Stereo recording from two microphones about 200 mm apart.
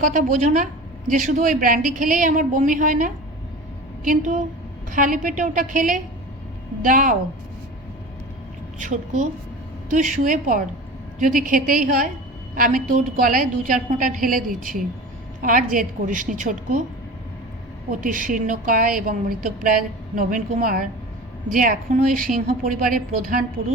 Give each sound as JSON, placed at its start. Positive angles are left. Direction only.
{"t": 0.0, "sound": "a woman's voice", "side_deg": -40}
{"t": 8.8, "sound": "a woman's voice", "side_deg": -35}
{"t": 18.0, "sound": "a woman's voice", "side_deg": -40}